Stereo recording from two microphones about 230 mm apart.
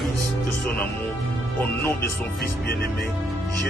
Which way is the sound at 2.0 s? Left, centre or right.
Left.